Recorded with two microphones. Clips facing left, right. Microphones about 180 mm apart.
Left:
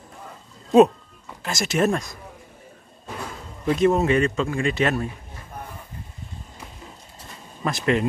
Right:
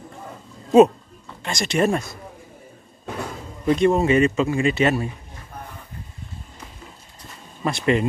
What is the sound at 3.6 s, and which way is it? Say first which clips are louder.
Speech: right 1 dB; centre (ahead or behind).